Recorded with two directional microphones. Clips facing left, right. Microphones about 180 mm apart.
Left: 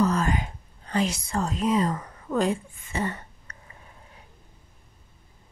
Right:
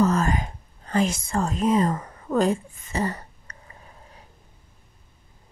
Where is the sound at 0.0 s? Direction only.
45° right (ahead or behind).